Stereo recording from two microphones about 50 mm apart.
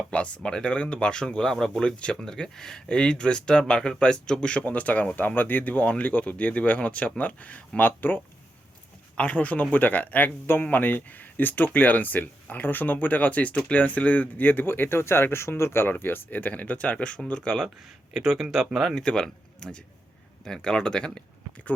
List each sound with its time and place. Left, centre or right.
0.1 s speech: left
7.8 s speech: left
9.1 s speech: left
17.6 s speech: centre
18.9 s speech: centre